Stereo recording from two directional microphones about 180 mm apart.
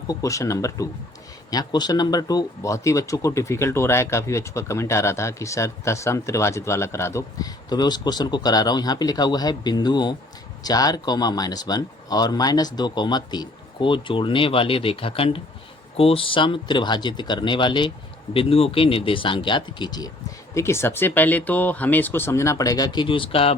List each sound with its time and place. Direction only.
0.1 s speech: 20° left (ahead or behind)